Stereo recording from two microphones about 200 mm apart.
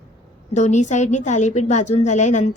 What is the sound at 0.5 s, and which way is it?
A woman's voice, 35° left (ahead or behind).